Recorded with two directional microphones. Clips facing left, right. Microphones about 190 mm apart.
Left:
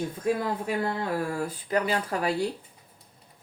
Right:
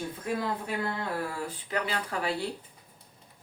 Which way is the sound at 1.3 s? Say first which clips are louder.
Left 6 dB; 40° left (ahead or behind).